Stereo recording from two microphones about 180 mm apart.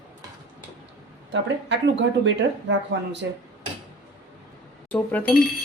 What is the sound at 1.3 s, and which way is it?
Speech, 80° right.